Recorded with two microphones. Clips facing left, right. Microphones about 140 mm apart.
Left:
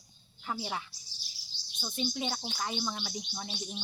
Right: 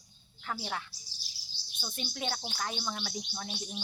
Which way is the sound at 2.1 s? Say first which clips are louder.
Left 2 dB; centre (ahead or behind).